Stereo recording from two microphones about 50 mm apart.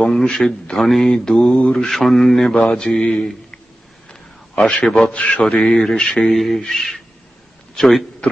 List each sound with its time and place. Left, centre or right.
0.0 s speech: centre
1.6 s mantra: centre
1.9 s speech: centre
4.8 s a man's voice: centre
5.1 s mantra: left
5.4 s speech: centre